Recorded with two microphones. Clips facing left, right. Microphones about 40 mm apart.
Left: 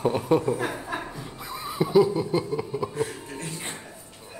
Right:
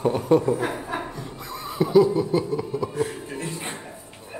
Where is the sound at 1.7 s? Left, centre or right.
Centre.